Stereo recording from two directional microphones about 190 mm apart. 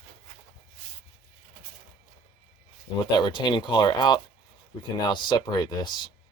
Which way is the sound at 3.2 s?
25° left (ahead or behind).